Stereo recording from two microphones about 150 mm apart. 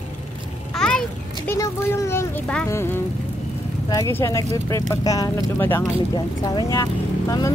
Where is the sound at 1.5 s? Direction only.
20° left (ahead or behind).